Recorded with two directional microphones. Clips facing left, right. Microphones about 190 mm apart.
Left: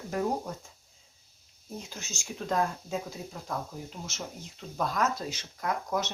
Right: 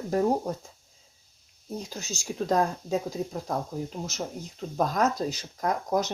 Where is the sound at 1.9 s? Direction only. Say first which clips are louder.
Right 9 dB; 35° right (ahead or behind).